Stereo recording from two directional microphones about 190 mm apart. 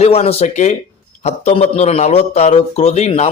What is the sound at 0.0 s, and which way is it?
A man's voice, 30° left (ahead or behind).